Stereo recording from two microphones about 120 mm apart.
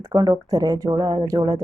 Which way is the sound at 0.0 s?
30° right (ahead or behind).